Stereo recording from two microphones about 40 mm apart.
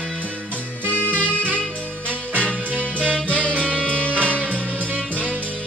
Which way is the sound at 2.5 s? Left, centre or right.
Right.